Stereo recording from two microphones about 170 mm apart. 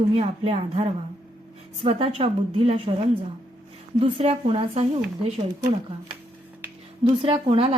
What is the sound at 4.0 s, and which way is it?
Speech, 35° right (ahead or behind).